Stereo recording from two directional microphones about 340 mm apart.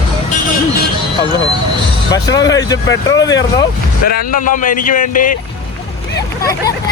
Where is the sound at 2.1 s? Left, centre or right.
Centre.